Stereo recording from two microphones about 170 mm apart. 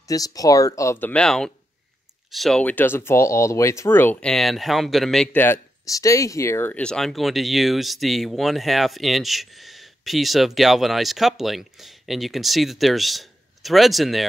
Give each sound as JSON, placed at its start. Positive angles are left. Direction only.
{"t": 0.1, "sound": "speech", "side_deg": 20}